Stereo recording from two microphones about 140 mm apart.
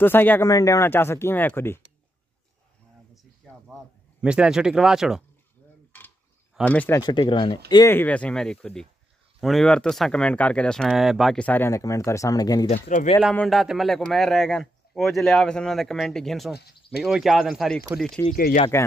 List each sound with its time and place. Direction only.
0.0 s speech: 15° left (ahead or behind)
3.6 s speech: 5° right (ahead or behind)
6.6 s speech: 10° left (ahead or behind)
7.0 s speech: 30° left (ahead or behind)
7.6 s speech: 20° left (ahead or behind); by 11.4 s centre (ahead or behind)
11.4 s speech: 15° left (ahead or behind)
12.6 s speech: 50° left (ahead or behind)
13.3 s speech: 5° left (ahead or behind)
18.3 s speech: 90° left